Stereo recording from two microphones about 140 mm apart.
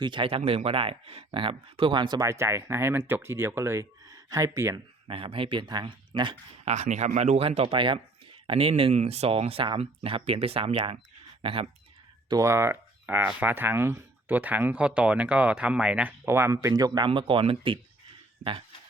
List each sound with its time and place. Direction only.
0.0 s speech: 35° right (ahead or behind)
5.0 s speech: 40° right (ahead or behind)
6.7 s speech: 55° right (ahead or behind)
12.3 s speech: 20° right (ahead or behind); by 17.7 s 40° right (ahead or behind)